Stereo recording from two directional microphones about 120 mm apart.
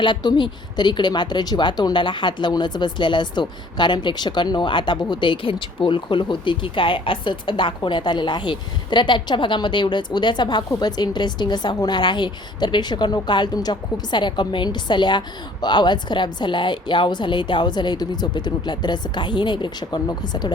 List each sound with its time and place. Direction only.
0.0 s a woman's voice: 40° left (ahead or behind)